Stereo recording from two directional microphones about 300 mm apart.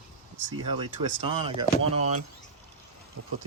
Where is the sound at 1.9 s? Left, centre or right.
Right.